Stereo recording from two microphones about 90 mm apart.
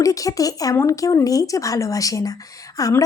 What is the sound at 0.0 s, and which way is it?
Speech, 40° left (ahead or behind).